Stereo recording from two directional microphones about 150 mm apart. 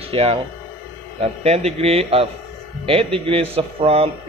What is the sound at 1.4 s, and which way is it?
A man's voice, 45° right (ahead or behind).